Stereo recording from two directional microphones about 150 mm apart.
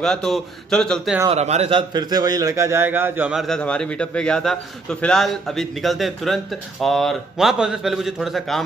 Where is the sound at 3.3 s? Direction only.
Centre (ahead or behind).